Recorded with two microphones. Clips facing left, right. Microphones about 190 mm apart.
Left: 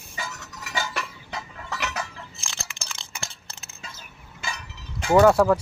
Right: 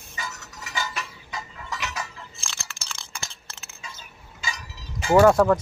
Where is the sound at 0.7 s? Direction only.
60° left (ahead or behind).